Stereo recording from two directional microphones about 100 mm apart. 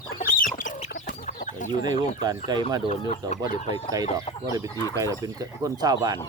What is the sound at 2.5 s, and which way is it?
Speech, 45° right (ahead or behind).